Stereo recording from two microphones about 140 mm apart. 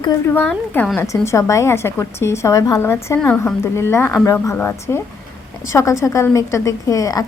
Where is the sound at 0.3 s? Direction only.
15° left (ahead or behind).